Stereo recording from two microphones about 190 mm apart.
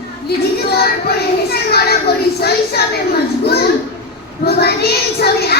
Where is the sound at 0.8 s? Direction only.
55° left (ahead or behind).